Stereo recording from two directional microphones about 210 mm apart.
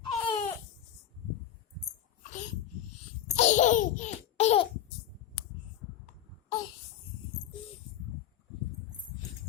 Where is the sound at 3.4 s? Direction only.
35° left (ahead or behind).